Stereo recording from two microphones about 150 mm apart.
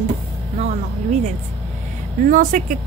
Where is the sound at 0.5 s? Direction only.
50° right (ahead or behind).